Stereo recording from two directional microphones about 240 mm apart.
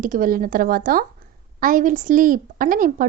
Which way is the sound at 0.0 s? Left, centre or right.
Right.